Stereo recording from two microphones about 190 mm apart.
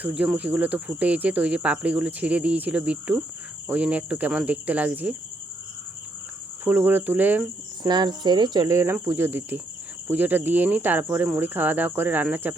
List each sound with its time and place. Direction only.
0.0 s speech: 5° right (ahead or behind)
6.7 s speech: 10° right (ahead or behind)
7.9 s speech: 25° right (ahead or behind)